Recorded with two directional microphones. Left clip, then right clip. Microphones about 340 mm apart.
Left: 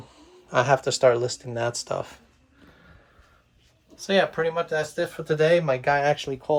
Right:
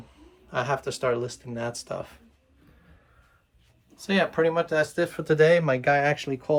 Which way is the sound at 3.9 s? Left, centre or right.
Centre.